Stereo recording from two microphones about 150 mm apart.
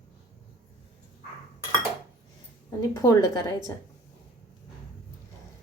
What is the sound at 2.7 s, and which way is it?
Speech, 20° left (ahead or behind).